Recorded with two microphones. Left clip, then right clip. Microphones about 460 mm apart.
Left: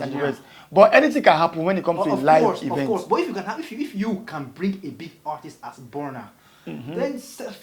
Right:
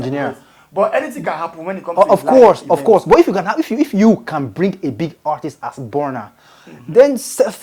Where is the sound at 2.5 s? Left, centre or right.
Right.